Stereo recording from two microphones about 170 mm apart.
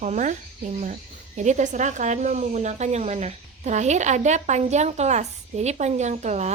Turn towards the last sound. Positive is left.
turn(degrees=-40)  # may be behind; listen again after turning